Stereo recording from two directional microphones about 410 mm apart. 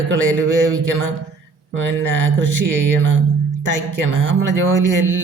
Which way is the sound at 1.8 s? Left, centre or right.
Right.